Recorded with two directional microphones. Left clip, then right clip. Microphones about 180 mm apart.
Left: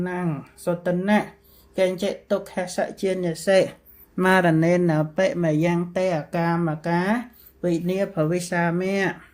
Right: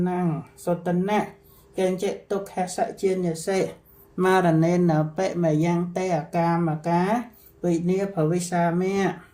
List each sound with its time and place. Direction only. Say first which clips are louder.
0.0 s speech: right 1 dB; 55° left (ahead or behind)